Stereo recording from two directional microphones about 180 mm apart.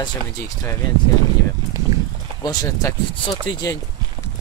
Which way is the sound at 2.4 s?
20° left (ahead or behind).